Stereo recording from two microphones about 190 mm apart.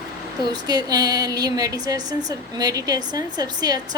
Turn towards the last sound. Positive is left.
turn(degrees=-20)  # may be behind; listen again after turning